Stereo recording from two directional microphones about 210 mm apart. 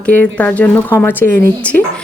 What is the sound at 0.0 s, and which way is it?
A woman's voice, 5° left (ahead or behind).